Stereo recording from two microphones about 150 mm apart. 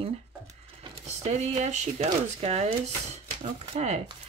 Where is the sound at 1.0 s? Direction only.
50° right (ahead or behind).